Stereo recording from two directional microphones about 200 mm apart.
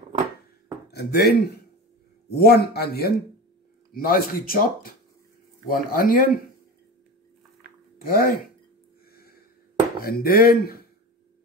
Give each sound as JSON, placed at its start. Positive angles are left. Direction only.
{"t": 0.9, "sound": "speech", "side_deg": 55}
{"t": 8.0, "sound": "speech", "side_deg": 45}
{"t": 9.9, "sound": "speech", "side_deg": 50}